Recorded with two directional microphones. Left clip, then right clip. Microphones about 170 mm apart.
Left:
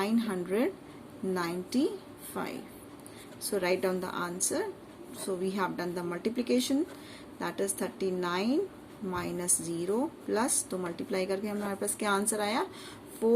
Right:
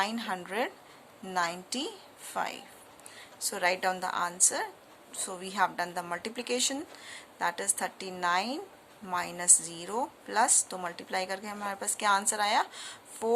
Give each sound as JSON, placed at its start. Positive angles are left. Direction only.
{"t": 0.0, "sound": "a woman's voice", "side_deg": -45}